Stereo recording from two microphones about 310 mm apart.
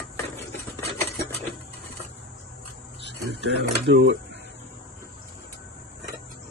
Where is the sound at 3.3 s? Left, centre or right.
Right.